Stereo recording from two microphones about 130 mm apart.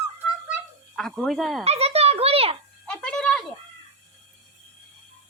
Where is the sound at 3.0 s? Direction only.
5° left (ahead or behind).